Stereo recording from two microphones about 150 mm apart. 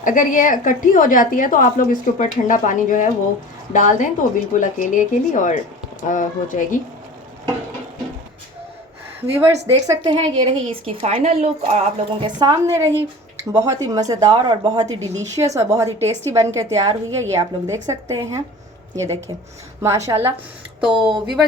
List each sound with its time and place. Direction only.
0.0 s a woman's voice: 60° left (ahead or behind)
9.2 s a woman's voice: 15° right (ahead or behind)
10.0 s a woman's voice: 35° right (ahead or behind)
12.2 s a woman's voice: 25° right (ahead or behind)
20.8 s speech: 5° right (ahead or behind)